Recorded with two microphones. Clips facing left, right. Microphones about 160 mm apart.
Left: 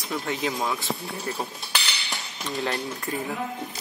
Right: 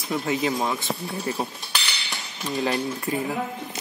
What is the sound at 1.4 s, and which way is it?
Cutlery, 10° right (ahead or behind).